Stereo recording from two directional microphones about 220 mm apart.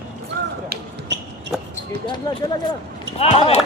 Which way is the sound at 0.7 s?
55° right (ahead or behind).